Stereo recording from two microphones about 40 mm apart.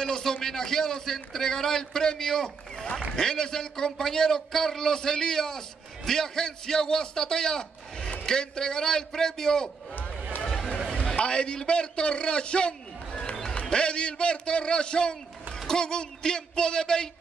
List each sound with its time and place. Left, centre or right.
0.0 s a man's voice: centre
11.1 s a man's voice: left